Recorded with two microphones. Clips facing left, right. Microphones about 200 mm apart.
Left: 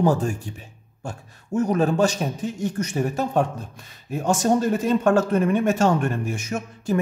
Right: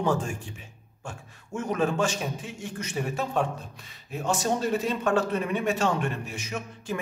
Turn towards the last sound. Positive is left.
turn(degrees=45)  # may be behind; listen again after turning